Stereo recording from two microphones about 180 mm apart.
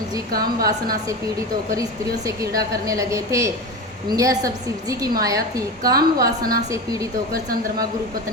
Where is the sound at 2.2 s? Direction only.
20° right (ahead or behind).